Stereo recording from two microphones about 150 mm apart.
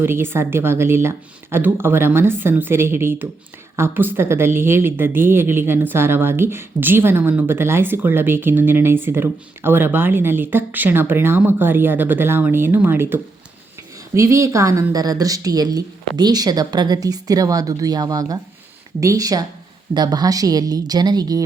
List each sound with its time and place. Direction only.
0.0 s a woman's voice: 15° right (ahead or behind)